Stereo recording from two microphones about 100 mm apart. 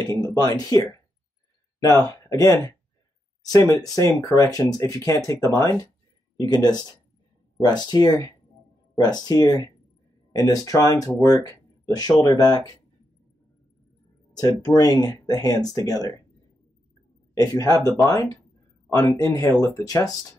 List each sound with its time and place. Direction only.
0.6 s speech: 40° left (ahead or behind)
14.3 s speech: 40° left (ahead or behind)
17.3 s a man's voice: 35° left (ahead or behind)